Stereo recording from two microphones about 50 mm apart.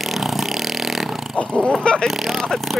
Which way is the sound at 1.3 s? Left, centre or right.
Left.